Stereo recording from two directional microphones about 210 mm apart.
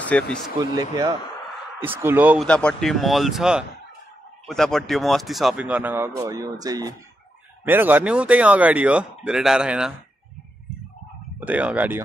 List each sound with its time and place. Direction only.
0.1 s speech: 5° left (ahead or behind)
0.6 s speech: 20° right (ahead or behind)
2.4 s speech: 5° left (ahead or behind)
11.3 s speech: 5° right (ahead or behind)